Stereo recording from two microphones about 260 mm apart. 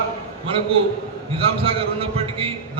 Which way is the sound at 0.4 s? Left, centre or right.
Right.